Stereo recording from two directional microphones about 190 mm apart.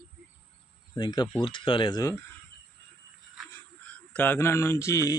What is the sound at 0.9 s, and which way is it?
Speech, 25° left (ahead or behind).